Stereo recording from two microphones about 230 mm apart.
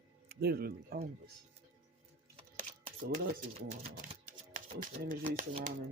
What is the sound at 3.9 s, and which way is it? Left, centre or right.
Speech, right.